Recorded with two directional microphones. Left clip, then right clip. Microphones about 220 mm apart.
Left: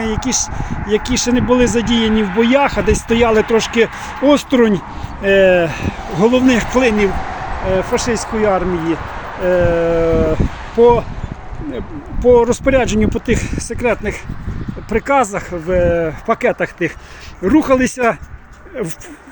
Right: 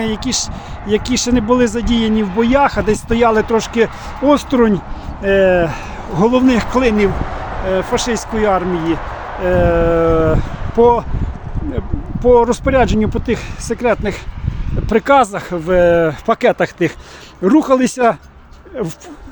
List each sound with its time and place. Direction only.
0.2 s speech: 10° right (ahead or behind)
12.2 s speech: centre (ahead or behind)